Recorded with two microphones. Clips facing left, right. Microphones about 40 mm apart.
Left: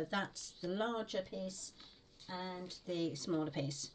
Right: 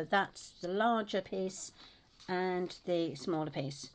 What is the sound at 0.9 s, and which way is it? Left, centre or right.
Speech, right.